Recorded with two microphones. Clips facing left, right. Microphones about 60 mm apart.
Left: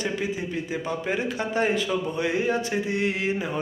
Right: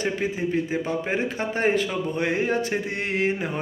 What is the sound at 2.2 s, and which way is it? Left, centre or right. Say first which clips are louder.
Speech: right 3 dB; right.